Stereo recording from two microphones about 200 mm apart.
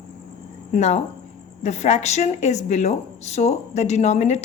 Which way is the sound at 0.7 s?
35° left (ahead or behind).